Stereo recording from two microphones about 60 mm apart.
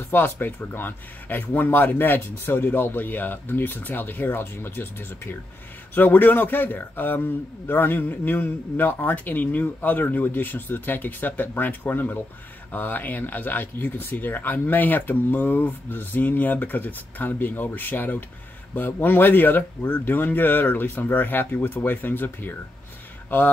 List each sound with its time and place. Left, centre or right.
0.1 s speech: left